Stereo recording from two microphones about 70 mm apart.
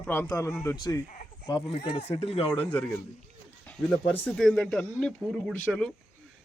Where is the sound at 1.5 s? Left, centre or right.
Left.